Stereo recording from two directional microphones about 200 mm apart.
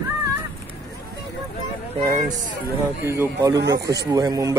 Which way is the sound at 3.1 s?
15° right (ahead or behind).